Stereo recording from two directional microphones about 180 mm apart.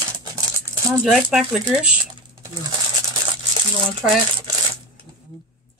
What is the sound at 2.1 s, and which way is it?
Typing, 25° right (ahead or behind).